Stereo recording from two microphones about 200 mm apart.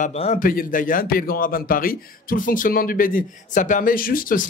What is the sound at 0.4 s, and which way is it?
A man's voice, 45° left (ahead or behind).